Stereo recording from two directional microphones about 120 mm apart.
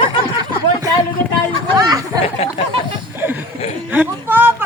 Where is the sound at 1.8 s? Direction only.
30° right (ahead or behind).